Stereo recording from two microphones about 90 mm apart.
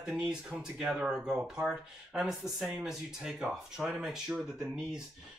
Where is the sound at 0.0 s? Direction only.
5° right (ahead or behind).